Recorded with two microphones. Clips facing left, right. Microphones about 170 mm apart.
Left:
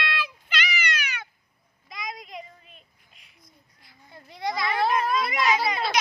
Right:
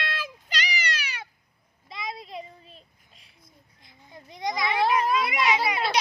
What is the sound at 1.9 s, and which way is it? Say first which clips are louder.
Child singing: right 1 dB; 30° right (ahead or behind).